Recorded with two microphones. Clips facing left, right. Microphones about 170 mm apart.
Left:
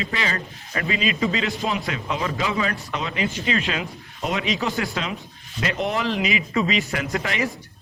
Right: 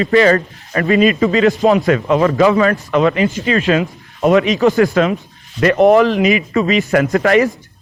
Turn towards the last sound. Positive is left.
turn(degrees=-45)  # may be behind; listen again after turning